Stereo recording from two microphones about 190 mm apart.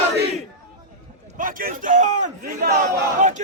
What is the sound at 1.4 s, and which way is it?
A man's voice, 45° right (ahead or behind).